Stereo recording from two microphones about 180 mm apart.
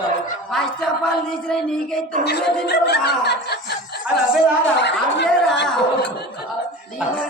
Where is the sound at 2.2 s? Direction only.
65° left (ahead or behind).